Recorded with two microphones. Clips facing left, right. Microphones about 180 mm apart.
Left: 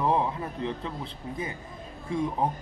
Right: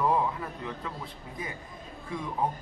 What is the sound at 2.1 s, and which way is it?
Speech, 30° left (ahead or behind).